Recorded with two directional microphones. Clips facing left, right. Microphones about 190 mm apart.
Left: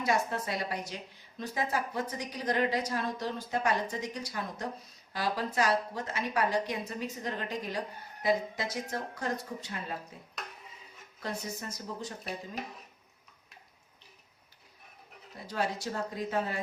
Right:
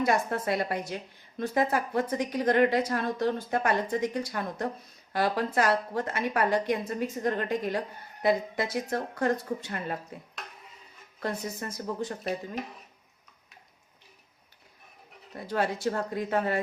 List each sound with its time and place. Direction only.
0.0 s a woman's voice: 55° right (ahead or behind)
11.2 s a woman's voice: 60° right (ahead or behind)
15.4 s a woman's voice: 55° right (ahead or behind)